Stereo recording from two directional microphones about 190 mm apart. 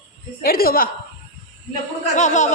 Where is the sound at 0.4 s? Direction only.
50° left (ahead or behind).